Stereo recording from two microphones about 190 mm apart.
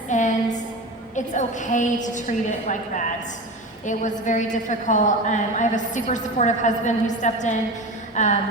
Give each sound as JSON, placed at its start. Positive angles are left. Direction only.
{"t": 0.1, "sound": "a sound", "side_deg": 40}
{"t": 1.1, "sound": "a woman's voice", "side_deg": 40}
{"t": 4.3, "sound": "a woman's voice", "side_deg": 40}